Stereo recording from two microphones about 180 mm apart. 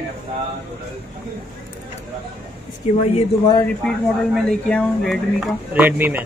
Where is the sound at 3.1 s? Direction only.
25° left (ahead or behind).